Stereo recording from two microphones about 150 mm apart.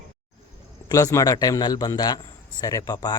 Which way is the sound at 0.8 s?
25° left (ahead or behind).